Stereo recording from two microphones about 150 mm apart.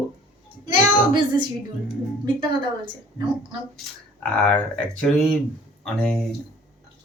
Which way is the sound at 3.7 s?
10° left (ahead or behind).